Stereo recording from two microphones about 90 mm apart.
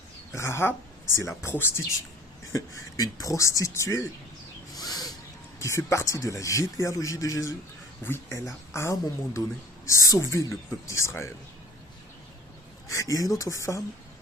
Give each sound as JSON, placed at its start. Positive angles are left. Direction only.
{"t": 0.3, "sound": "speech", "side_deg": 30}
{"t": 2.5, "sound": "speech", "side_deg": 40}
{"t": 4.7, "sound": "owl", "side_deg": 45}
{"t": 5.5, "sound": "speech", "side_deg": 35}
{"t": 8.0, "sound": "speech", "side_deg": 25}
{"t": 12.9, "sound": "speech", "side_deg": 40}